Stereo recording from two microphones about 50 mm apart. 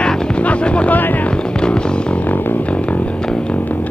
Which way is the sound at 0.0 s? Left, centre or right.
Left.